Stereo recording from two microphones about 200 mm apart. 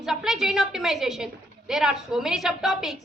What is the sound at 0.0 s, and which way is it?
A woman's voice, centre (ahead or behind).